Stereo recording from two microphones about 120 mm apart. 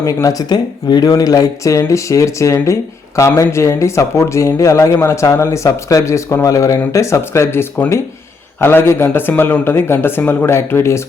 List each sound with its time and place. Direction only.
0.0 s speech: 25° left (ahead or behind)